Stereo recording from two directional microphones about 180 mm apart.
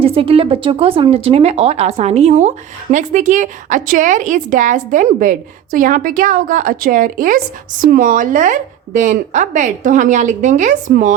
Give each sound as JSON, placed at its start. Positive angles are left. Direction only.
{"t": 0.0, "sound": "a woman's voice", "side_deg": -30}